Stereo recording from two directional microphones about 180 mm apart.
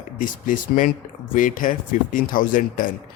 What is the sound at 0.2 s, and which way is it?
Speech, 50° left (ahead or behind).